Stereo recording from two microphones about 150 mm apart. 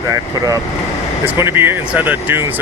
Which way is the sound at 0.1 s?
25° right (ahead or behind).